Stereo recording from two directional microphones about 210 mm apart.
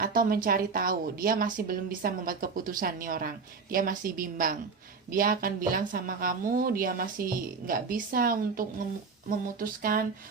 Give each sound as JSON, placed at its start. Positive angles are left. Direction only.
{"t": 0.0, "sound": "speech", "side_deg": -45}